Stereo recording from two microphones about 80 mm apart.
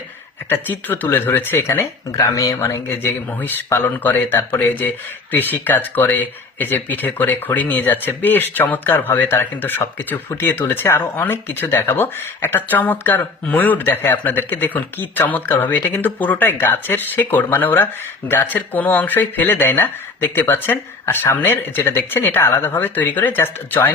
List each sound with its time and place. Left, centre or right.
0.5 s speech: left
2.1 s speech: left
2.6 s speech: left